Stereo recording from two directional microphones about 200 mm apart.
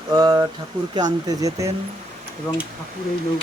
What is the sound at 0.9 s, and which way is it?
Speech, 20° right (ahead or behind).